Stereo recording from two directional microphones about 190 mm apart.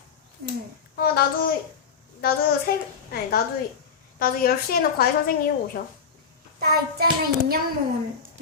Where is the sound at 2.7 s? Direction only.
50° left (ahead or behind).